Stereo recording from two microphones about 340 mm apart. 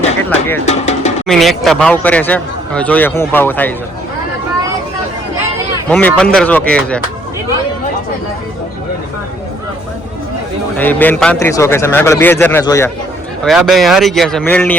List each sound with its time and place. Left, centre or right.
0.6 s percussion: centre
1.3 s a man's voice: centre
5.9 s a man's voice: centre
10.8 s a man's voice: centre